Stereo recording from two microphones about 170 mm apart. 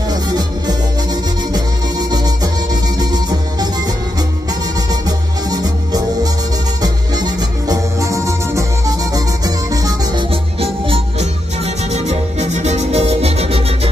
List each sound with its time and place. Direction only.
0.1 s music: 25° right (ahead or behind)
5.5 s music: 25° right (ahead or behind)
10.3 s music: 35° right (ahead or behind)